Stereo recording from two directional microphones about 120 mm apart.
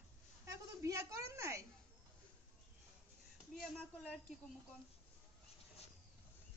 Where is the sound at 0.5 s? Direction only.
25° right (ahead or behind).